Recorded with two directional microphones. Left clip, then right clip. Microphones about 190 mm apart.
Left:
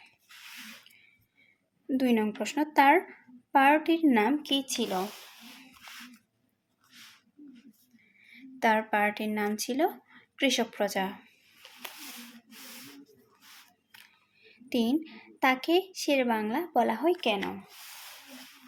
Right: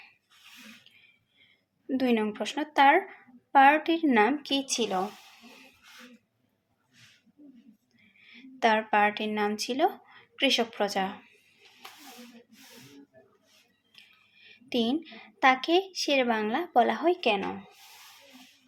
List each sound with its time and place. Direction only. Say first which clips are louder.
1.9 s speech: right 1 dB; 15° left (ahead or behind)
8.3 s speech: right 1 dB; 15° left (ahead or behind)
14.4 s speech: right 1 dB; 15° left (ahead or behind)